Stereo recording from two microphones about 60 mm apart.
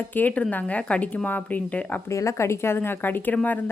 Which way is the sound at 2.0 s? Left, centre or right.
Left.